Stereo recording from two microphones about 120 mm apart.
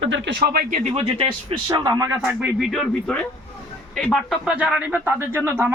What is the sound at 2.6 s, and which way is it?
Speech, centre (ahead or behind).